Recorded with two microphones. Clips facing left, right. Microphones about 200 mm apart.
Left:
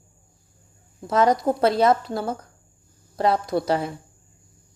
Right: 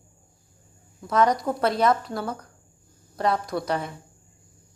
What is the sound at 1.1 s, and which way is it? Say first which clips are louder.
Speech: left 3 dB; 25° left (ahead or behind).